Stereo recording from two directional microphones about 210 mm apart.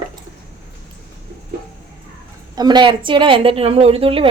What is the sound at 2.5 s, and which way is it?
A woman's voice, 20° right (ahead or behind).